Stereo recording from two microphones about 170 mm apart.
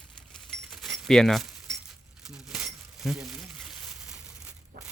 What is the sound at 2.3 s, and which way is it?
Crumpling, 5° right (ahead or behind).